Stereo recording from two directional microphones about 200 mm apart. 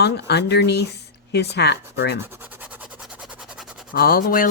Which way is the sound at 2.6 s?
5° right (ahead or behind).